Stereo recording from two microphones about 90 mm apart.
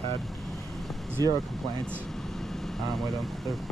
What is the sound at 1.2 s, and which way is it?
Speech, 45° right (ahead or behind).